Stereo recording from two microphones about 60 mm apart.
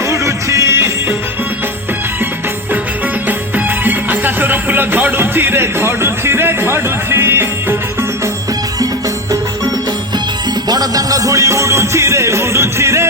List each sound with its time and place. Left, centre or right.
0.1 s music: right
3.2 s music: right
10.7 s music: right